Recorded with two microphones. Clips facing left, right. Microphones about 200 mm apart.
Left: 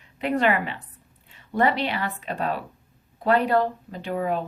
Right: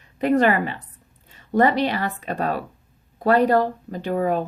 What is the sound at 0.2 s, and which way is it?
A woman's voice, 40° right (ahead or behind).